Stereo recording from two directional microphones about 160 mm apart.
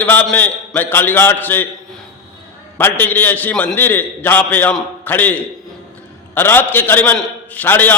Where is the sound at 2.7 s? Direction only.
10° left (ahead or behind).